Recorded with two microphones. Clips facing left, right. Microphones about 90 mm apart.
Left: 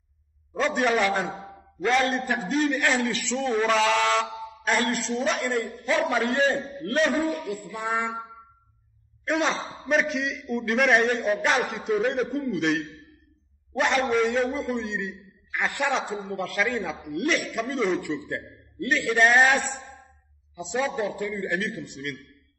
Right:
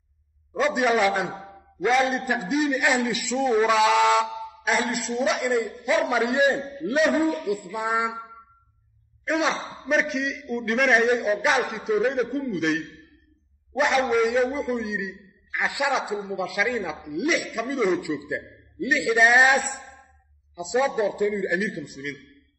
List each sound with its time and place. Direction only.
0.5 s a man's voice: 5° right (ahead or behind)
4.6 s a man's voice: centre (ahead or behind)
5.6 s a man's voice: 15° right (ahead or behind)
9.2 s a man's voice: centre (ahead or behind)
20.5 s a man's voice: 15° right (ahead or behind)
21.8 s a man's voice: centre (ahead or behind)